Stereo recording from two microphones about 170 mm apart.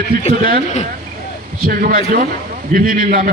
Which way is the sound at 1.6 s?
55° right (ahead or behind).